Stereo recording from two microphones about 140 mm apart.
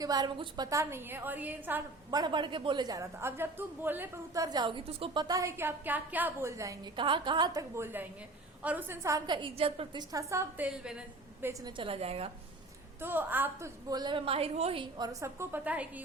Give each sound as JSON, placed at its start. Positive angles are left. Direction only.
{"t": 0.0, "sound": "a woman's voice", "side_deg": -30}
{"t": 2.0, "sound": "a woman's voice", "side_deg": -30}
{"t": 6.9, "sound": "a woman's voice", "side_deg": -35}
{"t": 7.9, "sound": "a woman's voice", "side_deg": -15}
{"t": 11.6, "sound": "a woman's voice", "side_deg": -40}
{"t": 13.0, "sound": "a woman's voice", "side_deg": -15}
{"t": 14.9, "sound": "a woman's voice", "side_deg": -25}